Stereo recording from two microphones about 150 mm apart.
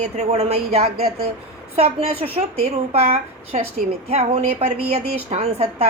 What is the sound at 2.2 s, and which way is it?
Speech, 40° right (ahead or behind).